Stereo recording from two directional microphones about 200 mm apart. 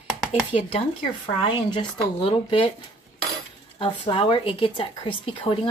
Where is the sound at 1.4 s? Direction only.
25° left (ahead or behind).